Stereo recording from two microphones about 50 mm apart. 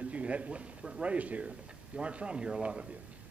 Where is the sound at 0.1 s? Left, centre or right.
Right.